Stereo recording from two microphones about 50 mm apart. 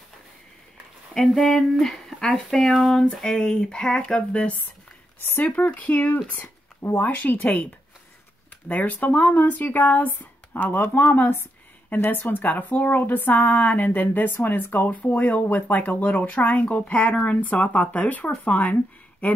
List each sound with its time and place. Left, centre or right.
1.1 s speech: centre; by 4.6 s left
5.2 s speech: left
5.6 s speech: left
7.1 s speech: left
8.6 s speech: left